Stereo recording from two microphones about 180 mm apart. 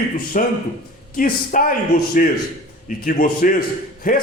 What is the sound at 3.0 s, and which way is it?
A man's voice, 50° left (ahead or behind).